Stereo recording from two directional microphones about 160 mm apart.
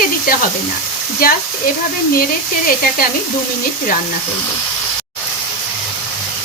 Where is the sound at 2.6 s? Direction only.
65° left (ahead or behind).